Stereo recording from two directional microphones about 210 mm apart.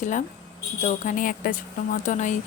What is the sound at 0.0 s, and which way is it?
Speech, 35° left (ahead or behind).